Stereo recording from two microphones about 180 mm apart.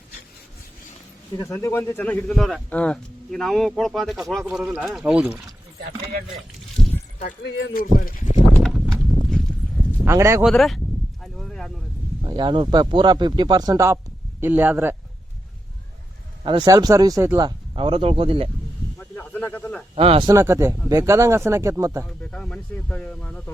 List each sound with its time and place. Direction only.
1.4 s a man's voice: 15° left (ahead or behind); by 5.4 s 5° right (ahead or behind)
7.4 s speech: 60° left (ahead or behind)
8.5 s clip-clop: centre (ahead or behind)
10.1 s speech: 15° right (ahead or behind)
10.4 s a man's voice: centre (ahead or behind)
11.2 s a sound: centre (ahead or behind)
12.2 s speech: 25° right (ahead or behind)
16.4 s speech: 25° right (ahead or behind)
18.9 s snake: 10° left (ahead or behind)
20.0 s speech: 35° right (ahead or behind)
20.2 s speech: 15° right (ahead or behind)
22.2 s speech: 5° left (ahead or behind)